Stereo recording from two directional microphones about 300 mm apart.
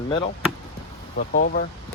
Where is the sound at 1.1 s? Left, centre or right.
Left.